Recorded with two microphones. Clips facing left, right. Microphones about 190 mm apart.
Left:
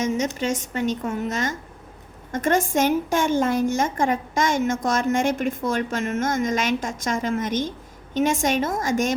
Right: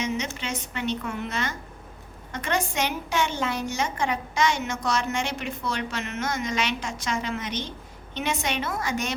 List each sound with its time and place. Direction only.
0.0 s a woman's voice: 45° left (ahead or behind)